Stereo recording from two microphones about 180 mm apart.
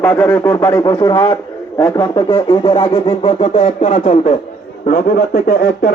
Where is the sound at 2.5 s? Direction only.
25° left (ahead or behind).